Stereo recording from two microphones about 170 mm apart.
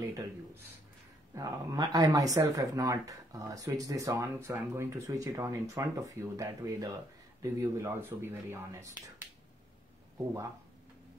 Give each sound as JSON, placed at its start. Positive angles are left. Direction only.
{"t": 1.3, "sound": "speech", "side_deg": -20}